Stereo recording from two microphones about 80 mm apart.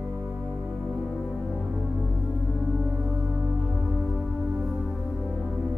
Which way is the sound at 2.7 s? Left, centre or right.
Centre.